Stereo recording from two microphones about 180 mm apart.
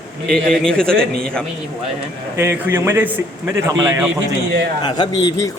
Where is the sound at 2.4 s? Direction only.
10° right (ahead or behind).